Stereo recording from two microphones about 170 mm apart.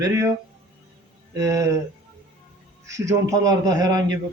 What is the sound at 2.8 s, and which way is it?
A man's voice, 20° right (ahead or behind).